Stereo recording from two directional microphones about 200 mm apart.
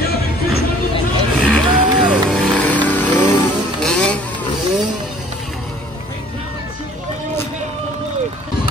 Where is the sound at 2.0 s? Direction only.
Centre (ahead or behind).